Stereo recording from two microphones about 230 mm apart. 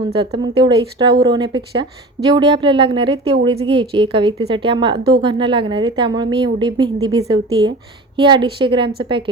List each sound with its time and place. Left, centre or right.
0.1 s a woman's voice: right